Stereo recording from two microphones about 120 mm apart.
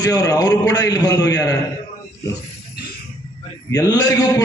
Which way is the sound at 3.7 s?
30° left (ahead or behind).